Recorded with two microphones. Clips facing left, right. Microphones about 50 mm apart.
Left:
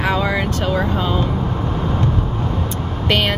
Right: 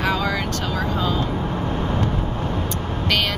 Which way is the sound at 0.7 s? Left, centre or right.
Left.